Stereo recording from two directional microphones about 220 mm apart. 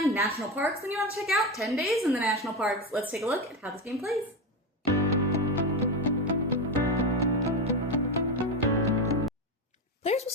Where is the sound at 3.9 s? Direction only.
Centre (ahead or behind).